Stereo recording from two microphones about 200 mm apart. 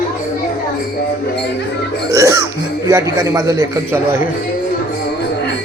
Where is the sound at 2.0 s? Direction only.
15° right (ahead or behind).